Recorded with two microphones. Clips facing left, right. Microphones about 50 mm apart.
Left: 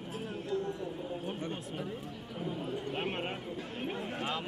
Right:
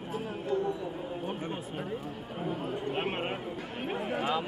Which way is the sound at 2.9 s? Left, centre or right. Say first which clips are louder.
Right 4 dB; centre.